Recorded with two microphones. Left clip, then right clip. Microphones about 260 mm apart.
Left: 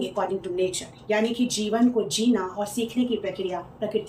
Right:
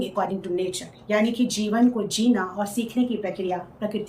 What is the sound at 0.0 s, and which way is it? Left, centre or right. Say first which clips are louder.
A woman's voice: right 1 dB; centre.